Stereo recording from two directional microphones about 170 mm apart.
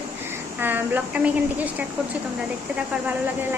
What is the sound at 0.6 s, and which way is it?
Speech, 10° right (ahead or behind).